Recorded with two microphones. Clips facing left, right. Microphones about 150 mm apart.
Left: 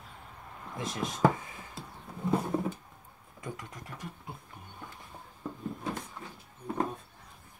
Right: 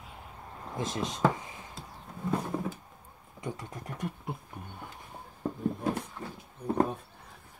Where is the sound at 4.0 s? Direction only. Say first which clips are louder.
Right 10 dB; 55° right (ahead or behind).